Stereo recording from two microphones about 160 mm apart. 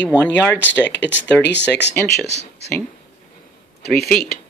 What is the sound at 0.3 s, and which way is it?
Speech, 90° left.